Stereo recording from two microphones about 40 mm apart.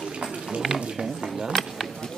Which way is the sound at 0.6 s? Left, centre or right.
Centre.